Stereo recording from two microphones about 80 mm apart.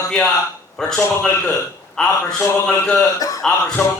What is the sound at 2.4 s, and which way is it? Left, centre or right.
Speech, left.